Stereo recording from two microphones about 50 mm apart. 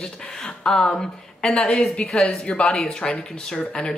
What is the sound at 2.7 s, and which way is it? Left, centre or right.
Speech, centre.